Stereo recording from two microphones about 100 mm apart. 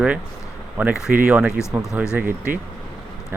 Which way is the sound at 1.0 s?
15° right (ahead or behind).